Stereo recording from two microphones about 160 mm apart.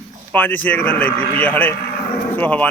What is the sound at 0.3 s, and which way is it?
A man's voice, 10° left (ahead or behind).